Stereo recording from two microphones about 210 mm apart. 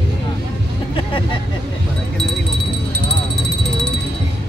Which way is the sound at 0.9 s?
25° left (ahead or behind).